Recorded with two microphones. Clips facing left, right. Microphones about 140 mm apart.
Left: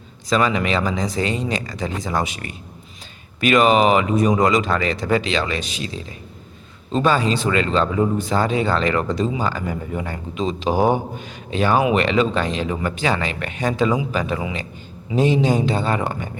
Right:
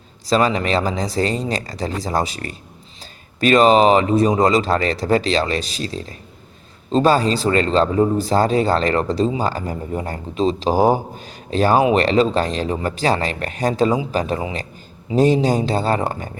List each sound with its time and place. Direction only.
0.3 s speech: 35° right (ahead or behind)